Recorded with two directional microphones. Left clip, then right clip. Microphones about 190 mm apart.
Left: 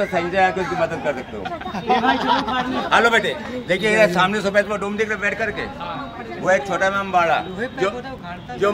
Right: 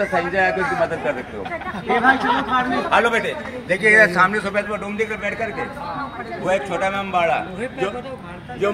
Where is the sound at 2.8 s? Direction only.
55° left (ahead or behind).